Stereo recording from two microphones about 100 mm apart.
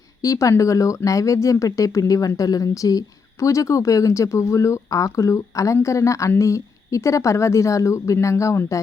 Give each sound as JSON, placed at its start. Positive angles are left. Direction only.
{"t": 0.2, "sound": "speech", "side_deg": 35}